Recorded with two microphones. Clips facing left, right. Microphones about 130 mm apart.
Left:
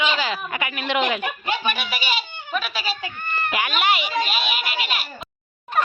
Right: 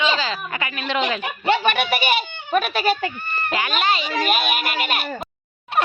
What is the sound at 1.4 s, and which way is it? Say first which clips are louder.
Speech: right 6 dB; 65° right (ahead or behind).